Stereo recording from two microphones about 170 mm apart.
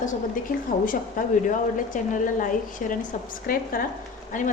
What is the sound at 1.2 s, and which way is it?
A woman's voice, 55° left (ahead or behind).